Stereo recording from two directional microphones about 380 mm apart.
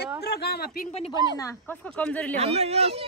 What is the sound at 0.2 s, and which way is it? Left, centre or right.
Speech, left.